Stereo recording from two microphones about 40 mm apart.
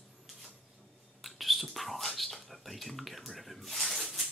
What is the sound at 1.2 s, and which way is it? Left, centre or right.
Whispering, centre.